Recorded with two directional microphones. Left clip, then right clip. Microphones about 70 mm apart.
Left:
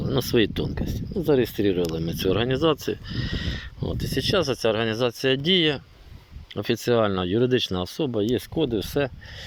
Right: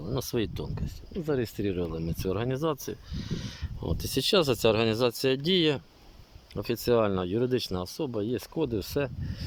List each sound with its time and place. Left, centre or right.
0.1 s speech: centre
3.8 s speech: right
6.5 s speech: centre
6.8 s speech: right; by 8.6 s centre
8.6 s speech: right